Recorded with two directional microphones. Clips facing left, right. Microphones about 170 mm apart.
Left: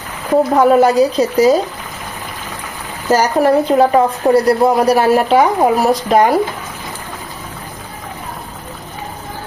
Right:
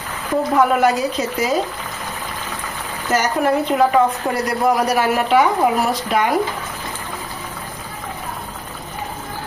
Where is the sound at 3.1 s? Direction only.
35° left (ahead or behind).